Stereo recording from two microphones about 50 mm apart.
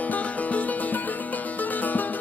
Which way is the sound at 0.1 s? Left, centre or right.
Left.